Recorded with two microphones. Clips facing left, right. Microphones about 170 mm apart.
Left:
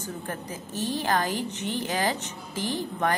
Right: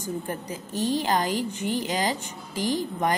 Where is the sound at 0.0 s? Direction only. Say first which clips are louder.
Right 3 dB; 15° right (ahead or behind).